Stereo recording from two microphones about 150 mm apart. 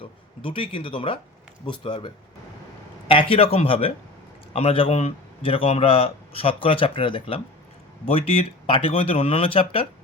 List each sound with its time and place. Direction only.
0.0 s speech: 35° left (ahead or behind)